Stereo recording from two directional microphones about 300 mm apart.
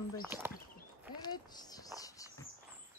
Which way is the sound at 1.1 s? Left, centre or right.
Centre.